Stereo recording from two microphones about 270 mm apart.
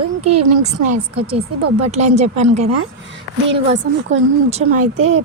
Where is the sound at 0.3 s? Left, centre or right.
Right.